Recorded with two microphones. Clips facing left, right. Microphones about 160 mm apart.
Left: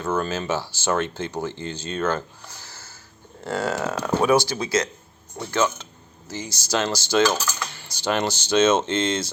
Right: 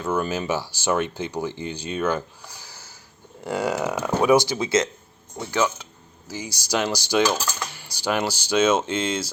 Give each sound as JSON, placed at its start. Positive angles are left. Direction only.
{"t": 0.0, "sound": "speech", "side_deg": -15}